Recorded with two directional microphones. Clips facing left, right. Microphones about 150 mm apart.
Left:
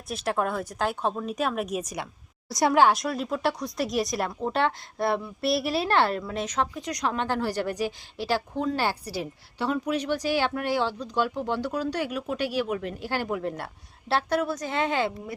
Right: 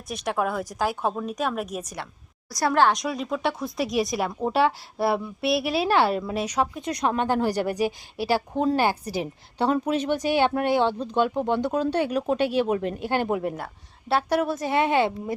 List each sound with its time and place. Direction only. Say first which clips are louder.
0.1 s speech: right 1 dB; centre (ahead or behind)
2.5 s a woman's voice: left 1 dB; 20° left (ahead or behind)
2.8 s a woman's voice: even; centre (ahead or behind)
6.8 s a woman's voice: right 4 dB; 25° right (ahead or behind)
9.6 s speech: right 4 dB; 30° right (ahead or behind)